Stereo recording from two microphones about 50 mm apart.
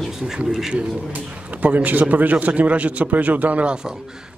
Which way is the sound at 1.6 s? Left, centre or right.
Right.